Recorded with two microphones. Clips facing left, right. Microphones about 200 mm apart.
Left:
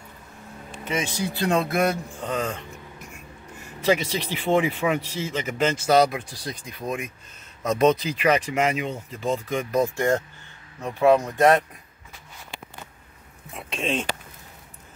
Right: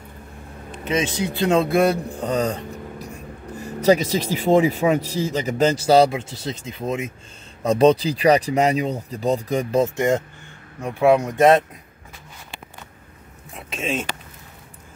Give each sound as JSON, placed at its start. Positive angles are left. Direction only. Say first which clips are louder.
{"t": 0.8, "sound": "speech", "louder": "right 5 dB", "side_deg": -20}
{"t": 9.8, "sound": "speech", "louder": "right 2 dB", "side_deg": -15}
{"t": 13.5, "sound": "speech", "louder": "right 1 dB", "side_deg": 0}